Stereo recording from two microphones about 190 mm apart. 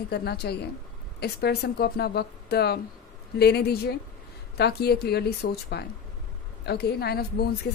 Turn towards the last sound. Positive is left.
turn(degrees=55)  # may be behind; listen again after turning